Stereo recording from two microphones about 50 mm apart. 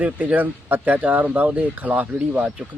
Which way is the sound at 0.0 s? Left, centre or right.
Right.